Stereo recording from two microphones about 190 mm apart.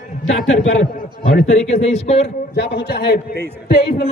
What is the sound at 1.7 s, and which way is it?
Speech, 35° left (ahead or behind).